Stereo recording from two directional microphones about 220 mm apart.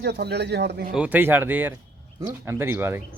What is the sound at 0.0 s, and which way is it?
Speech, 50° right (ahead or behind).